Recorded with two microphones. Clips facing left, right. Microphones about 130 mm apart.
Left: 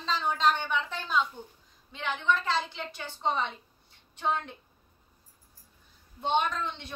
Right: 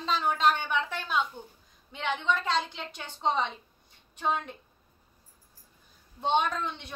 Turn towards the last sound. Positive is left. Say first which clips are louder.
# right 1 dB
turn(degrees=-15)  # may be behind; listen again after turning